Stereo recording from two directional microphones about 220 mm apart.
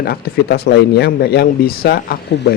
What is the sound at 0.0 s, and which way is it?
A man's voice, 45° left (ahead or behind).